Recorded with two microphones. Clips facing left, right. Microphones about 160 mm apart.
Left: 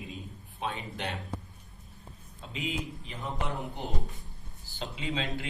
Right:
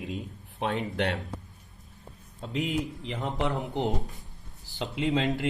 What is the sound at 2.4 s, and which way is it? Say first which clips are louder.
A man's voice: right 6 dB; 65° right (ahead or behind).